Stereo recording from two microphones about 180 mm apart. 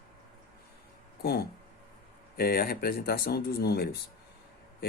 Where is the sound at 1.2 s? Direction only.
60° left (ahead or behind).